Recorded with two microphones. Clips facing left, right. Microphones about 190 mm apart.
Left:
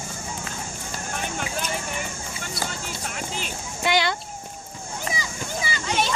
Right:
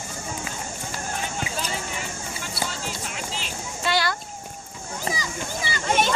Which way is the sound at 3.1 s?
50° left (ahead or behind).